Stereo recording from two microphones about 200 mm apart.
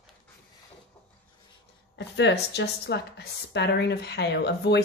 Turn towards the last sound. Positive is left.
turn(degrees=55)  # may be behind; listen again after turning